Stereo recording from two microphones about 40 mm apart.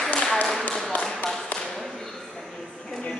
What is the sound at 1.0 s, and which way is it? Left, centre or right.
Tap, centre.